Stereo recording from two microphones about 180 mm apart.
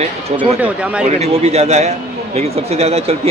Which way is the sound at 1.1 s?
35° right (ahead or behind).